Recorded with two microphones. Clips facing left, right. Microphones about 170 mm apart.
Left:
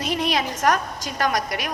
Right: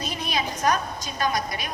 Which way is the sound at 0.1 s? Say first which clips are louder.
Left 8 dB; 85° left.